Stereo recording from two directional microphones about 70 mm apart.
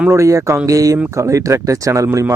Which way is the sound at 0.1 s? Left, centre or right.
Right.